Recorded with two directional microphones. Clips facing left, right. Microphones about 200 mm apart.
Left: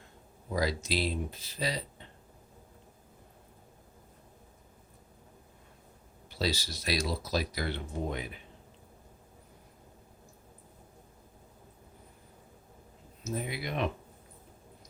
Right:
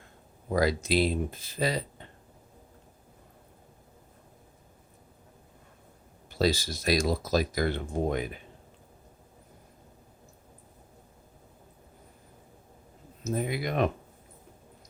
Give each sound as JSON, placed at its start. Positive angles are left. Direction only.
{"t": 0.5, "sound": "speech", "side_deg": -55}
{"t": 6.3, "sound": "speech", "side_deg": -50}
{"t": 13.2, "sound": "speech", "side_deg": -50}